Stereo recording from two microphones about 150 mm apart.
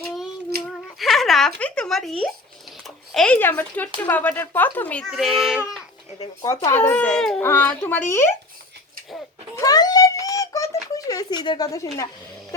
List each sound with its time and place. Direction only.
0.9 s speech: centre (ahead or behind)
6.4 s speech: 20° left (ahead or behind)
9.6 s a sound: 25° left (ahead or behind)